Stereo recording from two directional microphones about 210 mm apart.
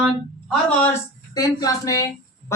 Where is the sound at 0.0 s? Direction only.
Centre (ahead or behind).